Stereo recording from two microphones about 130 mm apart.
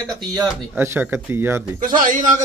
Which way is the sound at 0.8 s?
15° right (ahead or behind).